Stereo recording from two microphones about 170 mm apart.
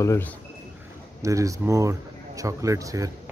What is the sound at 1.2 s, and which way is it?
A man's voice, 20° right (ahead or behind).